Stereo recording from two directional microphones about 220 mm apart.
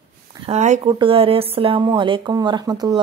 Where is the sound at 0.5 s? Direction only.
30° right (ahead or behind).